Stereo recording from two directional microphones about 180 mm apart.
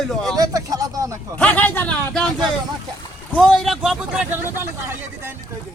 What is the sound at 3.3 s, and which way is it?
A man's voice, 5° left (ahead or behind).